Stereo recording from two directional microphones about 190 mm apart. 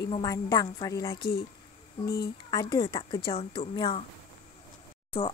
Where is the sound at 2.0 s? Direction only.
55° left (ahead or behind).